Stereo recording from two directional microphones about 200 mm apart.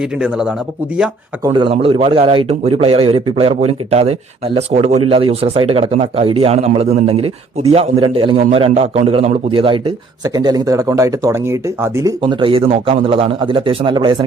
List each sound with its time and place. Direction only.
0.2 s speech: 5° right (ahead or behind)
1.5 s a man's voice: 25° right (ahead or behind)
12.2 s a man's voice: 25° right (ahead or behind)